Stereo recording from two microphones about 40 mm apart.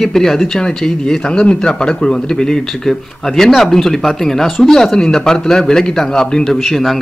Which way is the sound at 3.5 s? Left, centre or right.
Centre.